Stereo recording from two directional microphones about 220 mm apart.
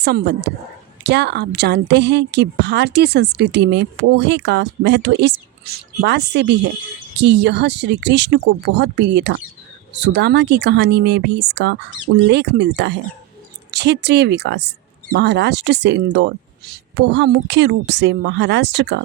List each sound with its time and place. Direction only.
0.0 s a woman's voice: 50° right (ahead or behind)